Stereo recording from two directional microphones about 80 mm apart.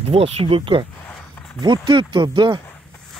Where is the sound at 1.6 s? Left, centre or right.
Right.